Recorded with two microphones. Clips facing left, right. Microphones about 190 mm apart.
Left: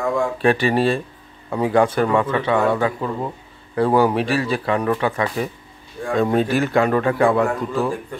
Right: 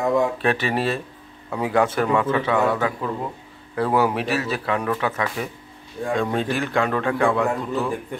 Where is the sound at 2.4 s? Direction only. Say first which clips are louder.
Left 2 dB; 30° left (ahead or behind).